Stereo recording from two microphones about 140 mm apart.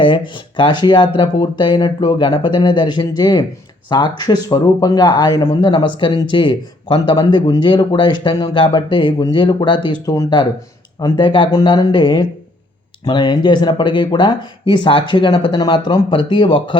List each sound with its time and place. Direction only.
0.5 s speech: 35° left (ahead or behind)